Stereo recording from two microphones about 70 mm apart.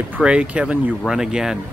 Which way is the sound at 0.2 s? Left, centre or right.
Centre.